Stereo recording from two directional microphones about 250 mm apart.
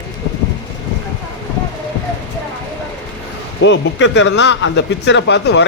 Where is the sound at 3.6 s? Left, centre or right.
Left.